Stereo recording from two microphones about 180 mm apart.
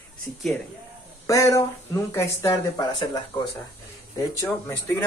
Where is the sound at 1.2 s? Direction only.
15° left (ahead or behind).